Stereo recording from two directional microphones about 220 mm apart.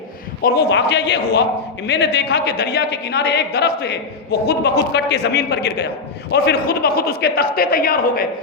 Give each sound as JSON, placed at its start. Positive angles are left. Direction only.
{"t": 0.4, "sound": "a woman's voice", "side_deg": 45}